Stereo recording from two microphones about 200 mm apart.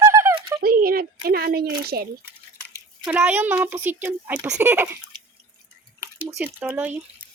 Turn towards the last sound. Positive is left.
turn(degrees=-10)  # may be behind; listen again after turning